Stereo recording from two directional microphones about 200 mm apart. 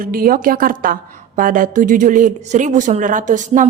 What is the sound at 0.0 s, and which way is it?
A woman's voice, 45° right (ahead or behind).